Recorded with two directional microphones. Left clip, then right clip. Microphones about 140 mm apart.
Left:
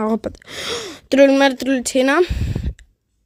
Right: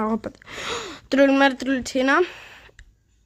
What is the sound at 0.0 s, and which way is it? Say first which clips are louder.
Speech: left 5 dB; 40° left (ahead or behind).